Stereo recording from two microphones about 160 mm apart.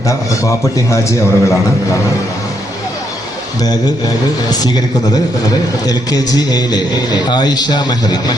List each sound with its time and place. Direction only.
0.4 s a man's voice: 20° left (ahead or behind)
5.8 s a man's voice: 25° left (ahead or behind)